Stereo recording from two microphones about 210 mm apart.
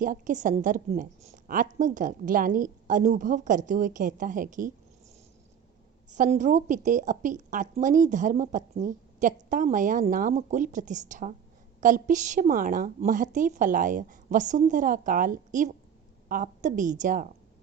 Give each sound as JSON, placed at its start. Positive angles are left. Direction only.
{"t": 0.0, "sound": "a woman's voice", "side_deg": -40}
{"t": 6.1, "sound": "a woman's voice", "side_deg": -35}